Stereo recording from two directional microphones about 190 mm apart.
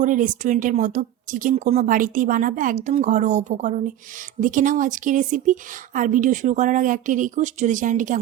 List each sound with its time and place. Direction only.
0.0 s speech: 45° right (ahead or behind)